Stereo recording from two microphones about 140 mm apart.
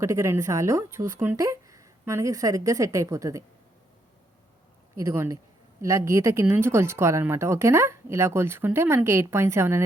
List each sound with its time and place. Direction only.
0.0 s a woman's voice: 20° right (ahead or behind)
4.9 s a woman's voice: 20° right (ahead or behind)